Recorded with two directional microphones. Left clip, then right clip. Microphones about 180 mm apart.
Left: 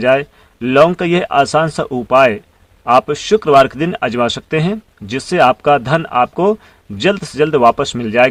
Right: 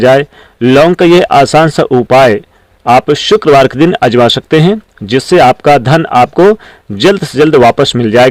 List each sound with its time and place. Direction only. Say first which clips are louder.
0.0 s speech: right 7 dB; 40° right (ahead or behind)